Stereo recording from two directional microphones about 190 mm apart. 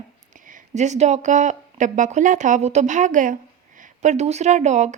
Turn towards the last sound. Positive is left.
turn(degrees=-40)  # may be behind; listen again after turning